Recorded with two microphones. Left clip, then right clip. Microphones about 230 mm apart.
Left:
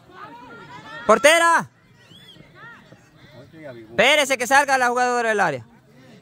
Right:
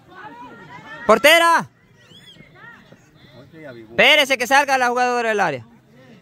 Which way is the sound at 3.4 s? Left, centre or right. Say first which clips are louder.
Right 1 dB; right.